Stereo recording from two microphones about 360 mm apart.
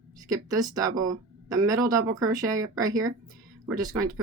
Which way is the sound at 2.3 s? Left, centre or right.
Centre.